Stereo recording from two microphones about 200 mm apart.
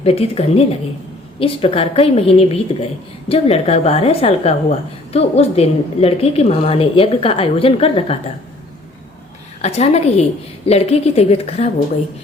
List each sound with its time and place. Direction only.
0.0 s a woman's voice: 30° left (ahead or behind)
9.6 s a woman's voice: 30° left (ahead or behind)